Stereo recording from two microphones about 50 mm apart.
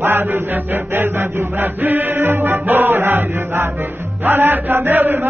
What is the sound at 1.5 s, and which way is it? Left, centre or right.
Music, right.